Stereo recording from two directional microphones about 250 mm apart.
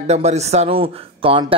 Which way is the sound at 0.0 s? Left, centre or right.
Right.